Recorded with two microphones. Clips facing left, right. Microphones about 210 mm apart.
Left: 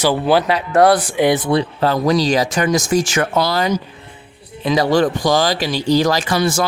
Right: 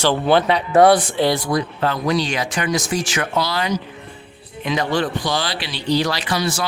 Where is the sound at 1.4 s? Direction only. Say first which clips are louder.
Left 4 dB; 30° left (ahead or behind).